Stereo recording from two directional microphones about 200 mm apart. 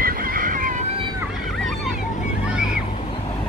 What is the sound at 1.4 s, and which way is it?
Vehicle, centre (ahead or behind).